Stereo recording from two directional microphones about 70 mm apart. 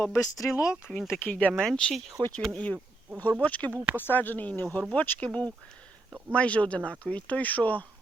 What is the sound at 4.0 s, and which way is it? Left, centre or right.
Speech, left.